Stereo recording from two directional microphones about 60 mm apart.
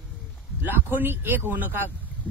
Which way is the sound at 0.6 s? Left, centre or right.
Right.